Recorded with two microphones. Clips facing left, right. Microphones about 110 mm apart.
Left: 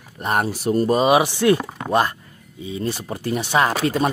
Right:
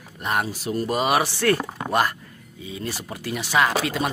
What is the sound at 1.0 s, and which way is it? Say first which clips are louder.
Speech: left 3 dB; 15° left (ahead or behind).